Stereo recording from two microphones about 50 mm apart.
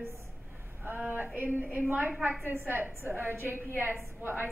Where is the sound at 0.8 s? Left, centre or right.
Right.